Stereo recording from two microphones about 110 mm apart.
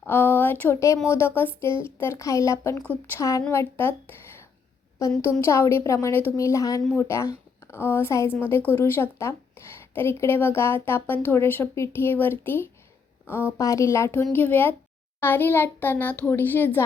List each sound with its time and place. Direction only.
0.0 s speech: 20° left (ahead or behind)
2.8 s speech: 15° left (ahead or behind)
3.2 s speech: 30° left (ahead or behind)
5.2 s a woman's voice: 25° left (ahead or behind)